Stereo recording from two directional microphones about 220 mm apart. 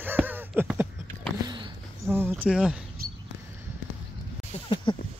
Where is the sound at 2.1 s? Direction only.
10° right (ahead or behind).